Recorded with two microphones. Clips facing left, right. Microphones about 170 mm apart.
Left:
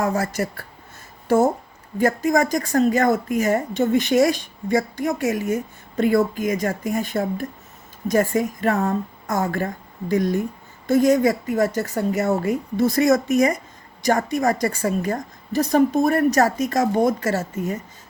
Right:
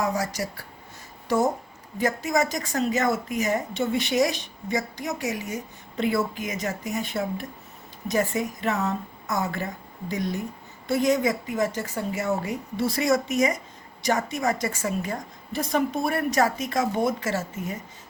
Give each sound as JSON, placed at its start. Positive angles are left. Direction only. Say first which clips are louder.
{"t": 0.0, "sound": "speech", "louder": "left 4 dB", "side_deg": 55}
{"t": 2.0, "sound": "a woman's voice", "louder": "left 5 dB", "side_deg": 50}